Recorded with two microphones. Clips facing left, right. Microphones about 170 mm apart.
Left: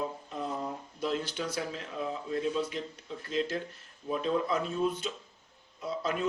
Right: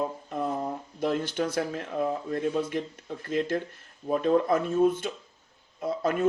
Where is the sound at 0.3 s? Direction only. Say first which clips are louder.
Right 6 dB; 55° right (ahead or behind).